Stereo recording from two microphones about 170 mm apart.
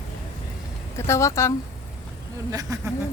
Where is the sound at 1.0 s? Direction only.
15° left (ahead or behind).